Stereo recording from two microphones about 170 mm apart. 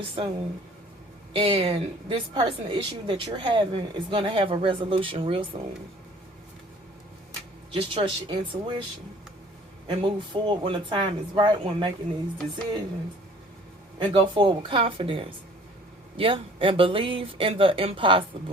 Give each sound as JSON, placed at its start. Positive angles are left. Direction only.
{"t": 0.0, "sound": "a woman's voice", "side_deg": -30}
{"t": 7.7, "sound": "a woman's voice", "side_deg": -35}
{"t": 9.8, "sound": "speech", "side_deg": -30}
{"t": 14.1, "sound": "a woman's voice", "side_deg": -30}